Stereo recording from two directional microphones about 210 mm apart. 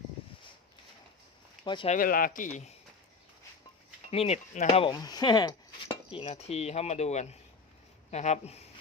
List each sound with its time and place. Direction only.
1.6 s speech: 25° left (ahead or behind)
2.0 s speech: 45° left (ahead or behind)
4.1 s speech: 30° left (ahead or behind)